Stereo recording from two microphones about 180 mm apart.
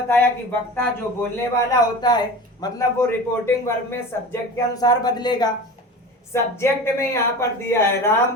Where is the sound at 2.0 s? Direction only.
20° left (ahead or behind).